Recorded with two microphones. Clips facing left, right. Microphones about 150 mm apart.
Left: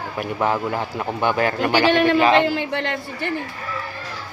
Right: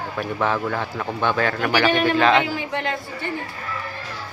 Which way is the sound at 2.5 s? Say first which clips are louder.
Left 2 dB; 65° left (ahead or behind).